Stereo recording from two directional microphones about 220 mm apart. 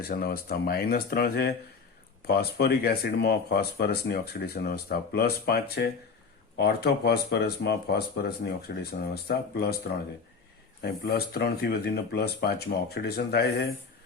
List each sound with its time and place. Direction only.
0.0 s speech: 45° left (ahead or behind)
10.8 s speech: 45° left (ahead or behind)